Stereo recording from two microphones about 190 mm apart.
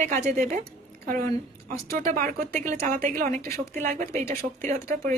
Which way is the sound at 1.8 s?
45° right (ahead or behind).